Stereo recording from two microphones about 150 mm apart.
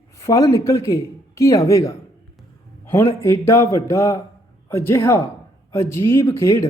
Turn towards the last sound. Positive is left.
turn(degrees=20)  # may be behind; listen again after turning